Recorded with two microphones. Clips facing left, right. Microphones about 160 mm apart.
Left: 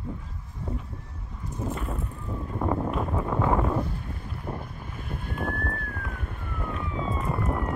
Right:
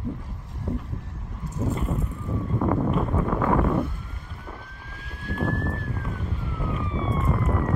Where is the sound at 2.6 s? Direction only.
10° left (ahead or behind).